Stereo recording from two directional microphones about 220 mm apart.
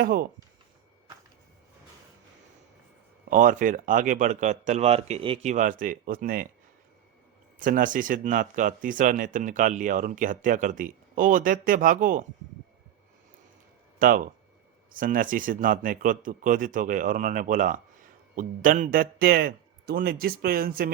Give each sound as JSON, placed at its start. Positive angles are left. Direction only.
{"t": 0.0, "sound": "speech", "side_deg": -45}
{"t": 3.2, "sound": "speech", "side_deg": -35}
{"t": 7.6, "sound": "speech", "side_deg": -35}
{"t": 14.0, "sound": "speech", "side_deg": -40}